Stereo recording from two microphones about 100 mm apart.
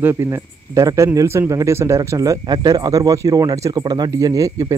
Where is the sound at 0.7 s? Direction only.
30° right (ahead or behind).